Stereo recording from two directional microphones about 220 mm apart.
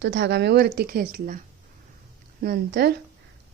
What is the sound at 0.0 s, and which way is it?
A woman's voice, 55° right (ahead or behind).